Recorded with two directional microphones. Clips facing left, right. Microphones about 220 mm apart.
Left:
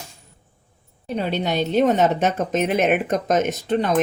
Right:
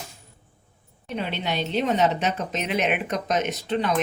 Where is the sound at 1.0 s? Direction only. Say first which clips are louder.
Left 5 dB; 40° left (ahead or behind).